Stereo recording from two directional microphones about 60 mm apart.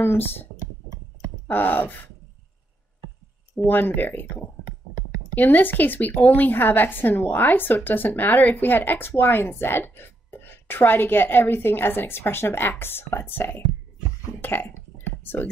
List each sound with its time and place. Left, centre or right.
0.0 s a woman's voice: left
1.5 s a woman's voice: left
3.6 s a woman's voice: left
5.3 s a woman's voice: left